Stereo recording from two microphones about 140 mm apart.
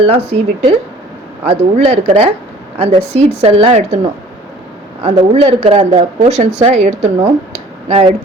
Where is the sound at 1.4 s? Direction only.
50° right (ahead or behind).